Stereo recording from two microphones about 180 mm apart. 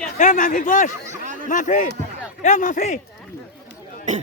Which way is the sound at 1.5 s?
45° left (ahead or behind).